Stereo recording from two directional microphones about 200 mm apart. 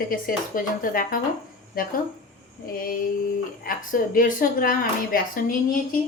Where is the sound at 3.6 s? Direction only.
45° left (ahead or behind).